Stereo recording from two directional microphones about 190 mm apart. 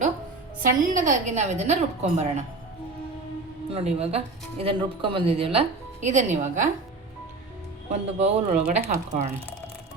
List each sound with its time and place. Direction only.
0.6 s speech: 45° right (ahead or behind)
3.7 s speech: 30° right (ahead or behind)
7.9 s speech: 35° right (ahead or behind)